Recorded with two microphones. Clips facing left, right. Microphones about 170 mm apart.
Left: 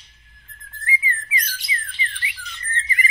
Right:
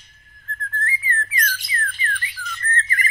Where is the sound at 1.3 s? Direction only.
50° right (ahead or behind).